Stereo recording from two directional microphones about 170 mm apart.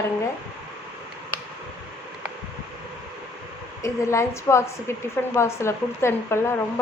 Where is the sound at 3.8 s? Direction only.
15° left (ahead or behind).